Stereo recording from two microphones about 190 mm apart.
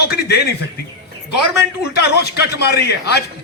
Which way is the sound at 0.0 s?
60° left (ahead or behind).